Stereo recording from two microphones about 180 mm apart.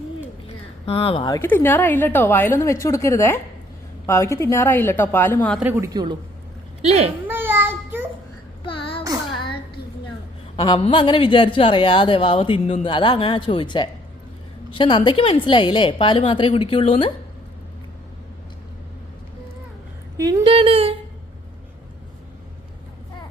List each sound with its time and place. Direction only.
0.4 s a sound: 35° left (ahead or behind)
1.3 s a woman's voice: 10° left (ahead or behind)
5.5 s a woman's voice: 10° right (ahead or behind)
6.8 s speech: 35° right (ahead or behind)
7.3 s child singing: 10° right (ahead or behind)
8.6 s a sound: 30° left (ahead or behind)
10.6 s speech: 30° left (ahead or behind)
20.1 s speech: 25° right (ahead or behind)